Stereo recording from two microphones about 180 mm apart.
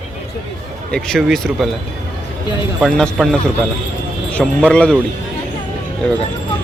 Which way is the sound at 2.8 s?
Centre (ahead or behind).